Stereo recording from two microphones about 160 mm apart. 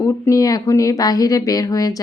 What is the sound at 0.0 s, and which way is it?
Speech, 20° left (ahead or behind).